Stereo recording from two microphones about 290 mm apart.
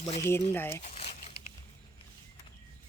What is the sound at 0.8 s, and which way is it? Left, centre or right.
Speech, left.